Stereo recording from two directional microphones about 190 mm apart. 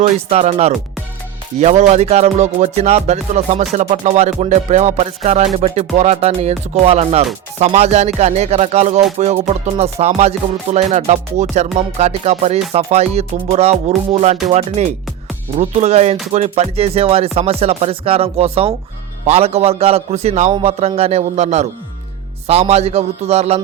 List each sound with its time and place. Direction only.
0.0 s music: 35° right (ahead or behind)
15.5 s music: 35° right (ahead or behind)